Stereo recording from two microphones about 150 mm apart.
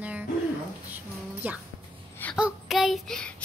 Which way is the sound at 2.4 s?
Centre (ahead or behind).